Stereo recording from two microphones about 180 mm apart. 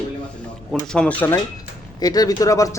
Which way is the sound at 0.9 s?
10° left (ahead or behind).